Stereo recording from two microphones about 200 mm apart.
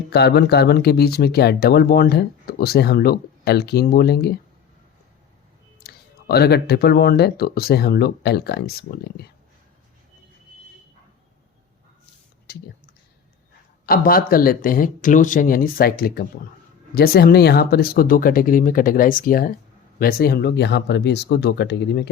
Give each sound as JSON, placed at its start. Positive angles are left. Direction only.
{"t": 0.1, "sound": "speech", "side_deg": 55}
{"t": 5.8, "sound": "speech", "side_deg": 50}
{"t": 12.5, "sound": "a sound", "side_deg": 50}
{"t": 13.8, "sound": "speech", "side_deg": 45}